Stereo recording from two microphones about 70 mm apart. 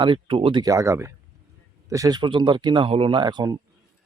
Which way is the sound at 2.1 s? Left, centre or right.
Right.